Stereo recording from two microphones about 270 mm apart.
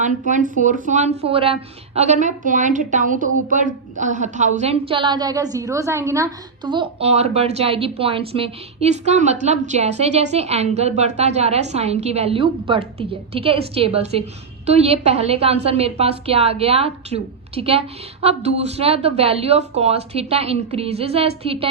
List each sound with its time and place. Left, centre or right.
0.0 s a woman's voice: right